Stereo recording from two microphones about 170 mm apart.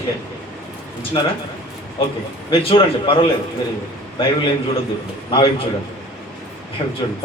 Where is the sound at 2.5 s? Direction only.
35° left (ahead or behind).